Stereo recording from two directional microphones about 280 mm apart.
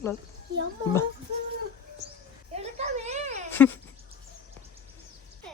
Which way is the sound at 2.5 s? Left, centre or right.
Right.